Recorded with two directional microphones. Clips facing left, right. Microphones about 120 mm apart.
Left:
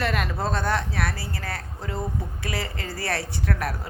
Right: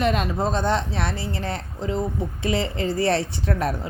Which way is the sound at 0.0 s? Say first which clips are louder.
Right 4 dB; 20° right (ahead or behind).